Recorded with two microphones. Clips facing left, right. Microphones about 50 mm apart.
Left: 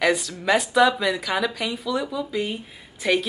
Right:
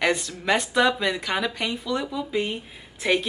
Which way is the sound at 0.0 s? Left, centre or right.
Centre.